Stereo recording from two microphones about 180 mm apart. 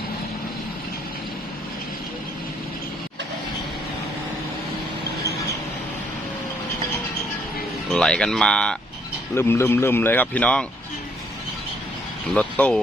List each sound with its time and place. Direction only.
7.9 s speech: 5° left (ahead or behind)
12.3 s speech: 5° left (ahead or behind)